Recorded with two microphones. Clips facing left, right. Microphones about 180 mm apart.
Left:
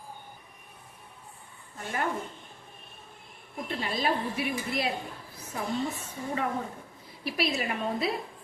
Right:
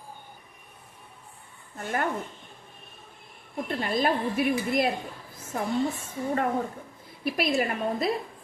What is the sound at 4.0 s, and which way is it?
Speech, 50° right (ahead or behind).